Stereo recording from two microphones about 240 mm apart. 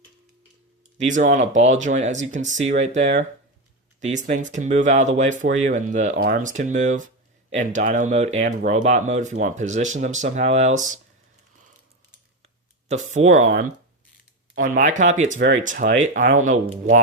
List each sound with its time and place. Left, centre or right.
0.9 s speech: right
12.9 s speech: right